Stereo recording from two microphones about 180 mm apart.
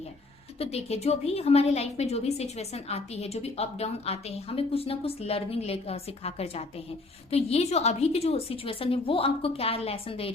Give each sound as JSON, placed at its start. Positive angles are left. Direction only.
{"t": 0.6, "sound": "a woman's voice", "side_deg": 35}